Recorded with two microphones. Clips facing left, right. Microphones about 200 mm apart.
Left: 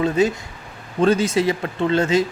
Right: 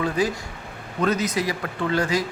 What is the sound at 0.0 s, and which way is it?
A man's voice, 25° left (ahead or behind).